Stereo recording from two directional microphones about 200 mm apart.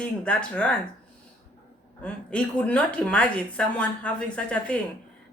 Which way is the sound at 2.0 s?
5° left (ahead or behind).